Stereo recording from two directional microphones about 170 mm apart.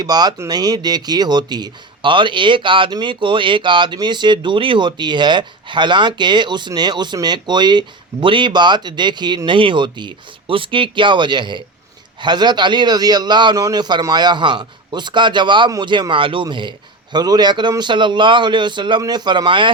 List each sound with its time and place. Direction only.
0.0 s speech: 25° right (ahead or behind)